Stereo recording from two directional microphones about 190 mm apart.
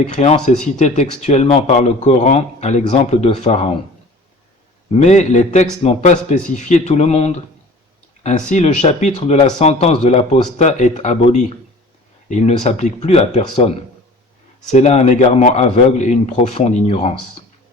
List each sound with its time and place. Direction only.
0.1 s speech: 35° left (ahead or behind)
4.9 s speech: 35° left (ahead or behind)
14.7 s speech: 35° left (ahead or behind)